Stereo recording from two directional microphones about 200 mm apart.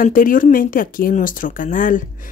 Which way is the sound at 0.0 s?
45° left (ahead or behind).